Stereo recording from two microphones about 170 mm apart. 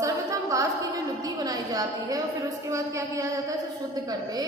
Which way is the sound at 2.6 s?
15° right (ahead or behind).